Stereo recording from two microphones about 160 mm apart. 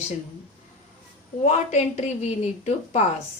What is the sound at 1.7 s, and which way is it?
Speech, 45° left (ahead or behind).